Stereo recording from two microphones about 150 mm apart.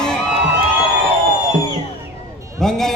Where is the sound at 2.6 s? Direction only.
5° left (ahead or behind).